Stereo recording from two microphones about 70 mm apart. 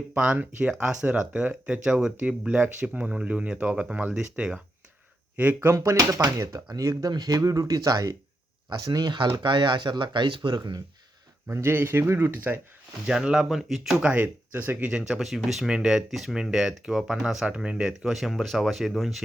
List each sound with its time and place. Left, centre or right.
0.1 s speech: right
5.5 s speech: right
7.3 s speech: right
8.8 s speech: right
11.4 s speech: right
13.1 s speech: centre
14.0 s speech: centre